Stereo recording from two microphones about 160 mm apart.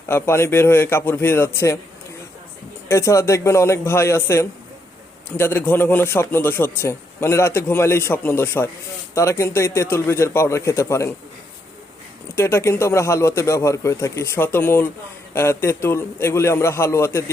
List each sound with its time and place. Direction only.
0.1 s a man's voice: 15° left (ahead or behind)
2.9 s a man's voice: 20° left (ahead or behind)
12.4 s a man's voice: 15° left (ahead or behind)